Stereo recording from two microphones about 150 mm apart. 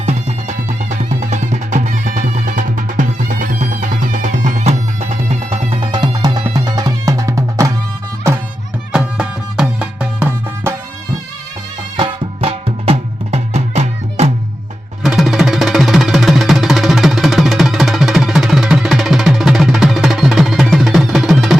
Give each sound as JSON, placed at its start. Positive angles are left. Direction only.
{"t": 0.0, "sound": "music", "side_deg": -50}
{"t": 8.9, "sound": "music", "side_deg": -5}
{"t": 11.9, "sound": "music", "side_deg": -35}
{"t": 15.0, "sound": "music", "side_deg": 0}